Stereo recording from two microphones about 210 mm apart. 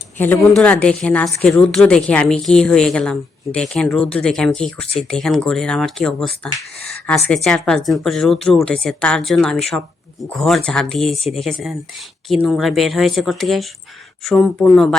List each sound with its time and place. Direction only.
0.2 s speech: 5° left (ahead or behind)
6.7 s a sound: 50° right (ahead or behind)
7.3 s speech: centre (ahead or behind)